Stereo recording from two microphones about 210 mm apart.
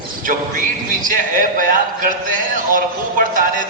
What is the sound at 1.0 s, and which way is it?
Speech, 40° right (ahead or behind).